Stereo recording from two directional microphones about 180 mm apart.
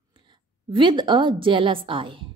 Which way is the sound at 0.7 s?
25° right (ahead or behind).